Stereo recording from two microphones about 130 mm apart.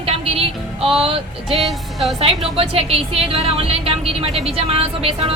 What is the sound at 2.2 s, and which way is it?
Speech, 45° right (ahead or behind).